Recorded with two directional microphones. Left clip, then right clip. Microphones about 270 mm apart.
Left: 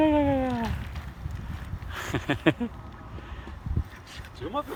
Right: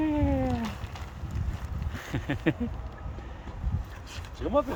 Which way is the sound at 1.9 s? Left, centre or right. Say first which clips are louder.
Left 5 dB; centre.